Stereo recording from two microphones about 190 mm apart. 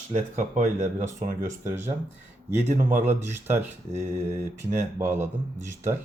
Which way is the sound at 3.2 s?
10° right (ahead or behind).